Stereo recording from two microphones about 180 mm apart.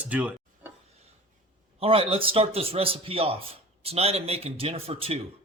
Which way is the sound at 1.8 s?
30° right (ahead or behind).